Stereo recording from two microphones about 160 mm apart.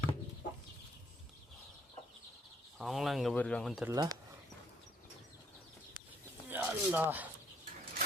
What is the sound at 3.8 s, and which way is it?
Speech, 25° right (ahead or behind).